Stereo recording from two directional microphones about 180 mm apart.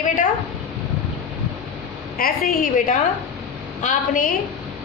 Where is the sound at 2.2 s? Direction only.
50° left (ahead or behind).